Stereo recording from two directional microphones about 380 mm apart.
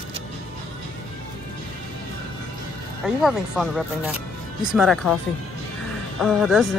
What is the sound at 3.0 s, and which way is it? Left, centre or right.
Speech, centre.